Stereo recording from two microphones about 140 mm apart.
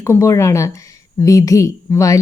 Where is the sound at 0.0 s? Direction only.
20° left (ahead or behind).